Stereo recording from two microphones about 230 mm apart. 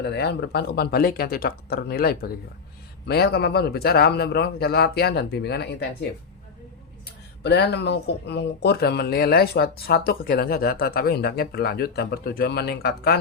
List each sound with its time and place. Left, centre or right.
0.0 s speech: left
7.4 s speech: left